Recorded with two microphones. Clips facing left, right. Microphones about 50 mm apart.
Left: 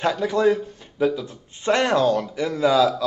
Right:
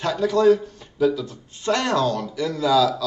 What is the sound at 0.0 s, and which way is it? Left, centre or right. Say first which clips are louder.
A man's voice: right 1 dB; left.